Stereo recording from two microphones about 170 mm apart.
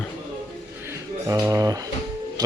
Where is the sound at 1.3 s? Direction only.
20° right (ahead or behind).